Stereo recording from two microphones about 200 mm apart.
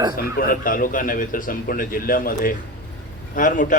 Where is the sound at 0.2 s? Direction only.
45° left (ahead or behind).